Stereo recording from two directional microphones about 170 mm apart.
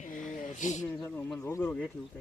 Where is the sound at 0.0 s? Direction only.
50° left (ahead or behind).